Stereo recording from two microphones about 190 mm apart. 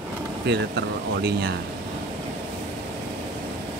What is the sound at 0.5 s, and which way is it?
Speech, 60° right (ahead or behind).